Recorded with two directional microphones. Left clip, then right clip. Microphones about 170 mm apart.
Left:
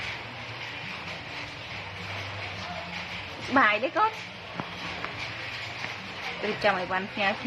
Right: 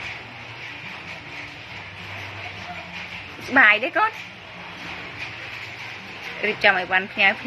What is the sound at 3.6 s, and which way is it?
Speech, 15° right (ahead or behind).